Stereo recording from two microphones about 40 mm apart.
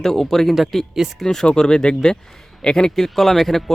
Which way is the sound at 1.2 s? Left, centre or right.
Centre.